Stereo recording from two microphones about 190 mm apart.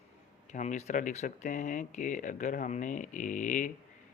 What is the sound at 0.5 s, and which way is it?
Speech, 40° left (ahead or behind).